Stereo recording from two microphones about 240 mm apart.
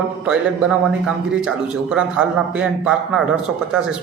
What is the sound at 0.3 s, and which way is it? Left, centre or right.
A man's voice, centre.